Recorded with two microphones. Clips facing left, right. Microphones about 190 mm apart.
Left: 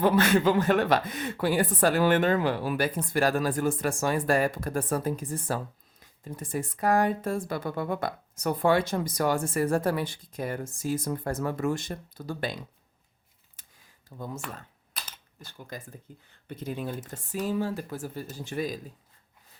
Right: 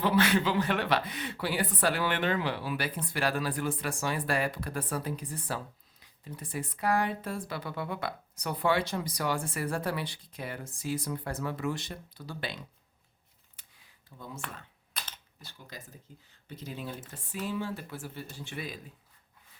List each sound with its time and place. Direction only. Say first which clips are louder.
0.0 s speech: left 4 dB; 45° left (ahead or behind)
13.6 s a sound: left 3 dB; 45° left (ahead or behind)
15.4 s speech: left 7 dB; 50° left (ahead or behind)